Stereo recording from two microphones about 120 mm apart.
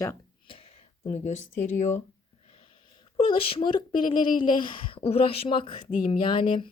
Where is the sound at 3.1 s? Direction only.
50° left (ahead or behind).